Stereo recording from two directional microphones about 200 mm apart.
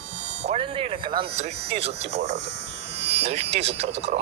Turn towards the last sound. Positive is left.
turn(degrees=-30)  # may be behind; listen again after turning